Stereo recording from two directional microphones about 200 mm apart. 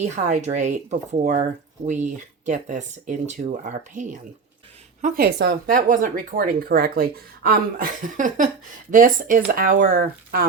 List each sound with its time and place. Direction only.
0.0 s speech: 35° right (ahead or behind)
2.5 s speech: 40° right (ahead or behind)